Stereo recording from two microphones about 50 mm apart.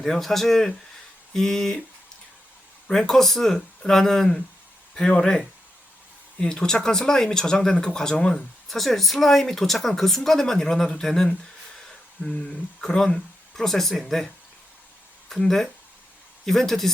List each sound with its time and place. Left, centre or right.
0.0 s speech: centre
2.8 s speech: centre
6.4 s speech: centre
12.4 s speech: centre
15.3 s speech: centre